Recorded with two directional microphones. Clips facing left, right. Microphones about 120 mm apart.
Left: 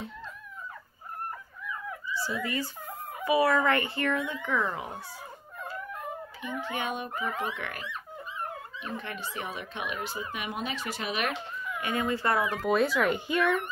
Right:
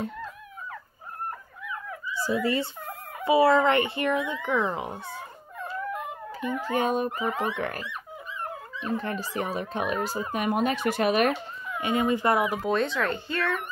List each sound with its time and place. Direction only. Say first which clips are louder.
2.1 s speech: right 7 dB; 45° right (ahead or behind)
3.3 s speech: right 4 dB; 25° right (ahead or behind)
6.6 s speech: right 8 dB; 40° right (ahead or behind)
7.1 s speech: right 4 dB; 80° right
7.5 s speech: right 6 dB; 40° right (ahead or behind)
11.8 s speech: right 5 dB; 20° right (ahead or behind)
12.6 s speech: left 1 dB; 5° left (ahead or behind)